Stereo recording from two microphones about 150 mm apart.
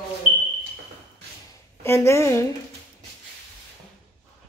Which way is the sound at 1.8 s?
20° left (ahead or behind).